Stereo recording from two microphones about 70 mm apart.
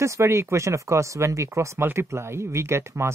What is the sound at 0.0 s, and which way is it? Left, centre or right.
Speech, right.